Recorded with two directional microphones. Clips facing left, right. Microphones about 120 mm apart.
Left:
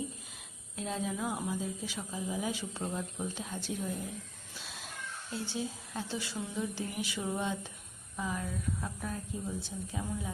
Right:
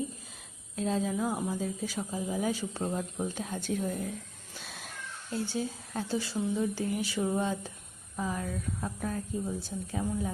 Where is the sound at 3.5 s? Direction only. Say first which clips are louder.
Right 5 dB; 45° right (ahead or behind).